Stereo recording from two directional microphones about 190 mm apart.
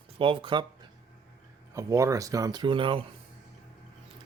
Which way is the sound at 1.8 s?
15° right (ahead or behind).